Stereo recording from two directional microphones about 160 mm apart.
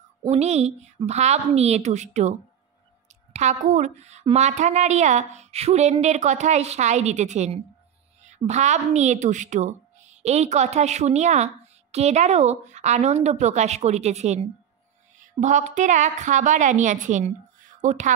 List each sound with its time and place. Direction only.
0.3 s a woman's voice: 45° right (ahead or behind)
3.3 s a woman's voice: 50° right (ahead or behind)